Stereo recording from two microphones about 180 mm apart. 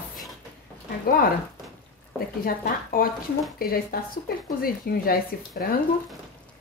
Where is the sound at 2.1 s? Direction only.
55° left (ahead or behind).